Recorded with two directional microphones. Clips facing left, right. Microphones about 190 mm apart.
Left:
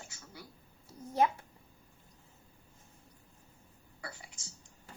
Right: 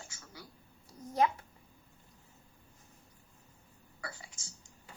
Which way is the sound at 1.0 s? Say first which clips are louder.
Even; 30° left (ahead or behind).